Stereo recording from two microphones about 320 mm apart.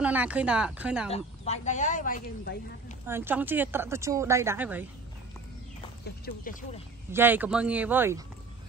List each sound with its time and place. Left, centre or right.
0.0 s speech: centre
1.1 s speech: left
3.1 s a woman's voice: centre
6.2 s speech: left
7.1 s speech: centre